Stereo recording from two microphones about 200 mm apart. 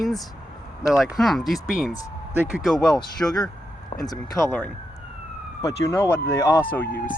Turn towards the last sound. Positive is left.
turn(degrees=10)  # may be behind; listen again after turning